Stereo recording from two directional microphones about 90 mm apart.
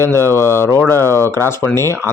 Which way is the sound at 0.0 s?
30° left (ahead or behind).